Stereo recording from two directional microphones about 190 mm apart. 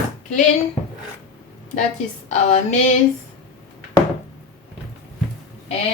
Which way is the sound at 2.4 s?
40° left (ahead or behind).